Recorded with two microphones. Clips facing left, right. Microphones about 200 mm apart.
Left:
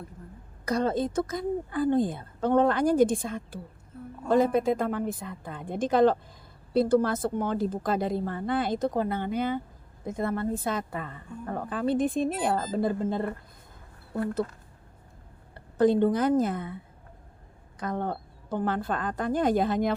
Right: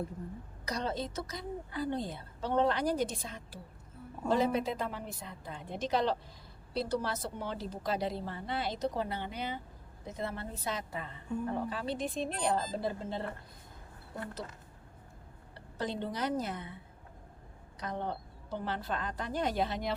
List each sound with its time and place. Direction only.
0.6 s a woman's voice: 50° left (ahead or behind)
15.5 s a woman's voice: 50° left (ahead or behind)
17.7 s a woman's voice: 50° left (ahead or behind)